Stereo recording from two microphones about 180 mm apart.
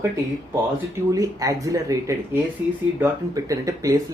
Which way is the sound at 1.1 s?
20° right (ahead or behind).